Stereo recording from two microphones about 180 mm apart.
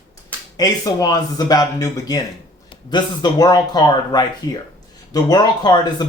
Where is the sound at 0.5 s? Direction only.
20° left (ahead or behind).